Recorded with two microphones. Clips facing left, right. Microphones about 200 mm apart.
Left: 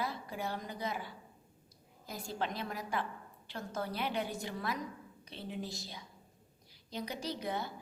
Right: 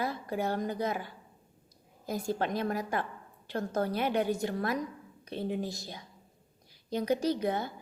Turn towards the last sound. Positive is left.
turn(degrees=-55)  # may be behind; listen again after turning